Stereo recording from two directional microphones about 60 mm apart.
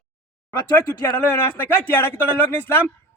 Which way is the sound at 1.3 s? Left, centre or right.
Left.